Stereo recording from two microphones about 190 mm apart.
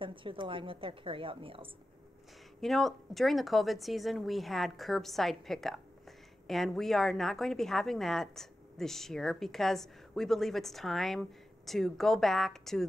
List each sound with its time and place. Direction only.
0.0 s a woman's voice: 25° right (ahead or behind)
2.6 s a woman's voice: centre (ahead or behind)